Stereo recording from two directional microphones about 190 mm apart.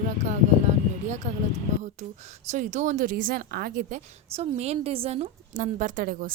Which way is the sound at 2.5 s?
40° right (ahead or behind).